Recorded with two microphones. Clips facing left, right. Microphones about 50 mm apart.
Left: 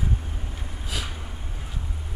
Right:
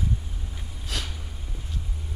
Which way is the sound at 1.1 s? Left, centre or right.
Left.